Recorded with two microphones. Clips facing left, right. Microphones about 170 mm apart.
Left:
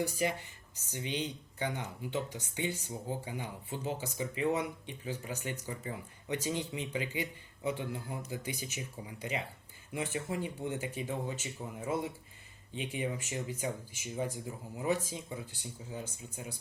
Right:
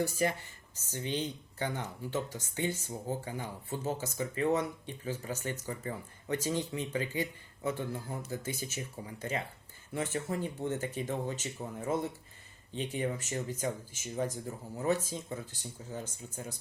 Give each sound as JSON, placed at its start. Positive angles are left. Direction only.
{"t": 0.1, "sound": "speech", "side_deg": 15}